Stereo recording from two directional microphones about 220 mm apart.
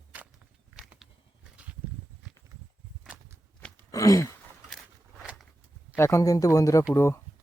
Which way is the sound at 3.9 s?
15° left (ahead or behind).